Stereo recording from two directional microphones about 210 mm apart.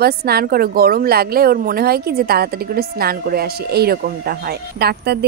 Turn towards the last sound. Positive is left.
turn(degrees=-50)  # may be behind; listen again after turning